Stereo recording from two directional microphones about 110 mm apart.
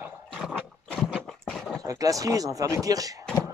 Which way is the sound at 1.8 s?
30° right (ahead or behind).